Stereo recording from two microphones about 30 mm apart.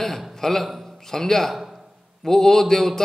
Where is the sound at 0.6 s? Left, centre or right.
Centre.